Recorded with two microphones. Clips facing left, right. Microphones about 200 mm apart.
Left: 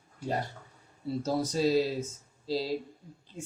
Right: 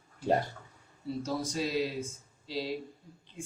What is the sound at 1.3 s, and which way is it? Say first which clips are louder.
A man's voice: left 7 dB; 40° left (ahead or behind).